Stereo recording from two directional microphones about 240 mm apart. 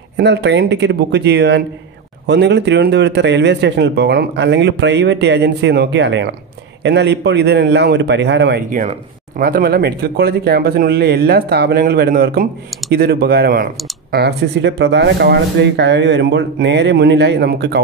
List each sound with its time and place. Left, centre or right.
0.2 s speech: right